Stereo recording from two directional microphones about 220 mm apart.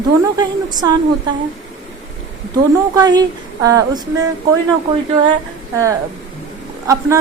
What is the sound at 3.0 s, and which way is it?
A woman's voice, 20° right (ahead or behind).